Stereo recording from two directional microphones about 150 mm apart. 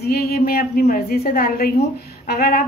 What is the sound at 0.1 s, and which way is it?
A woman's voice, 90° left.